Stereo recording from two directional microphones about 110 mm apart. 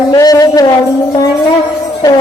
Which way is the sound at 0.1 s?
35° left (ahead or behind).